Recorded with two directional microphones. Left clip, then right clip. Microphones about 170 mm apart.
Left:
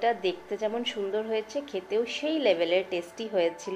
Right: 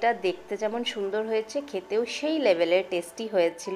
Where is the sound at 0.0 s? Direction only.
35° right (ahead or behind).